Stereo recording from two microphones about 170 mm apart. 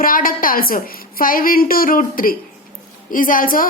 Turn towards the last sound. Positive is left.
turn(degrees=55)  # may be behind; listen again after turning